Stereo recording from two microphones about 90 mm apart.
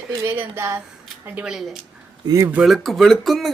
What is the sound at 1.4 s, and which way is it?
Speech, 5° right (ahead or behind).